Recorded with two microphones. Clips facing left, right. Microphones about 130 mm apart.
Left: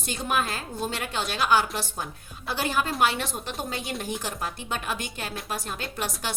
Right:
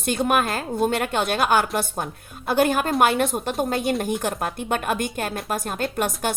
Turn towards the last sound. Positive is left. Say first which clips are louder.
# right 8 dB
turn(degrees=-50)  # may be behind; listen again after turning